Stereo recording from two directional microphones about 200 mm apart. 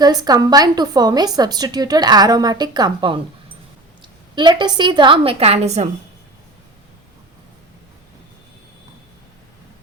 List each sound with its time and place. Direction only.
0.0 s a woman's voice: 20° right (ahead or behind)